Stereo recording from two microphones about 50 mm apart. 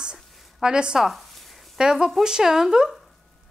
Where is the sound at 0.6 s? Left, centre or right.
Centre.